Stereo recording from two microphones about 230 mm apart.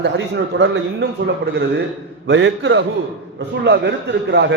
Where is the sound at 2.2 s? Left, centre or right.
Right.